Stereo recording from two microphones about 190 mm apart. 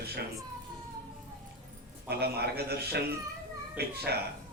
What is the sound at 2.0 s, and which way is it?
Speech, 55° right (ahead or behind).